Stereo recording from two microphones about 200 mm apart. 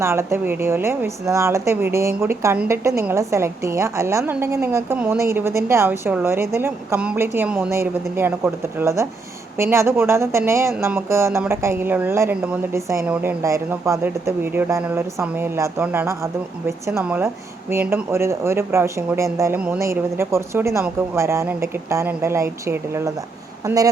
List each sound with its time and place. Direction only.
0.0 s speech: 15° right (ahead or behind)